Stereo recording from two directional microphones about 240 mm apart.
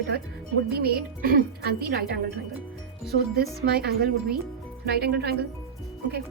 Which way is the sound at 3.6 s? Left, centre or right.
Right.